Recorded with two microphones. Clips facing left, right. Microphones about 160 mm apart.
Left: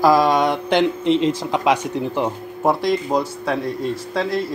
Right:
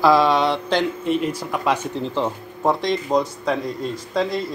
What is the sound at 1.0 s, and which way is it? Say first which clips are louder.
Speech: left 4 dB; 90° left.